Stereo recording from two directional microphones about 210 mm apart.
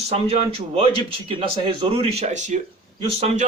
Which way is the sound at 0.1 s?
30° right (ahead or behind).